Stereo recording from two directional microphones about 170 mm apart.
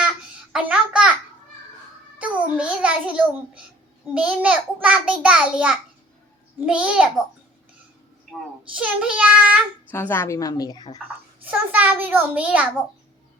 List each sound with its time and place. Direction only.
0.5 s a sound: 5° right (ahead or behind)
2.1 s a child's voice: 5° right (ahead or behind)
8.3 s a child's voice: 5° right (ahead or behind)
9.9 s a woman's voice: 10° left (ahead or behind)
11.4 s a child's voice: 10° right (ahead or behind)